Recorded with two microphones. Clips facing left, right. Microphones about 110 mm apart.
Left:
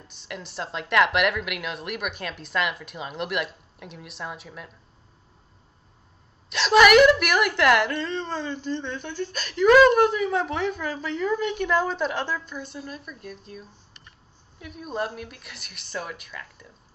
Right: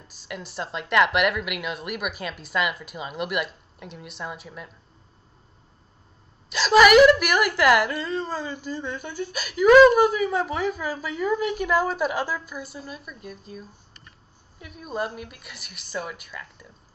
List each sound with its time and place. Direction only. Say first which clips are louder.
0.1 s a woman's voice: right 1 dB; centre (ahead or behind)
6.5 s a woman's voice: right 1 dB; centre (ahead or behind)